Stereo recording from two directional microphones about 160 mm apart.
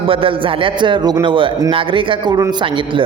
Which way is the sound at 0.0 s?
35° right (ahead or behind).